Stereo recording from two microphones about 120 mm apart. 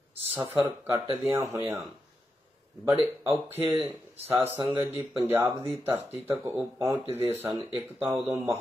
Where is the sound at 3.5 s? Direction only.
15° right (ahead or behind).